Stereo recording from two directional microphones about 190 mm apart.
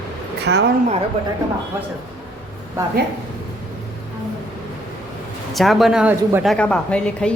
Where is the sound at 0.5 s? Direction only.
65° right (ahead or behind).